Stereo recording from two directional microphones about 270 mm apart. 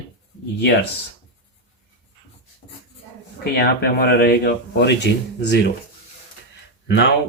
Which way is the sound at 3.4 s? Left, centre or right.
Left.